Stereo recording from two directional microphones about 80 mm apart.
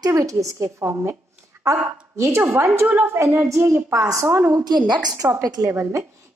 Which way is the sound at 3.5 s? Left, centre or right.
Right.